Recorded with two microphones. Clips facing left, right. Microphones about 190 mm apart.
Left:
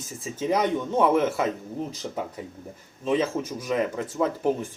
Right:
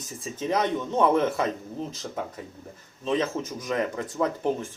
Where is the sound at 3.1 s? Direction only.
10° left (ahead or behind).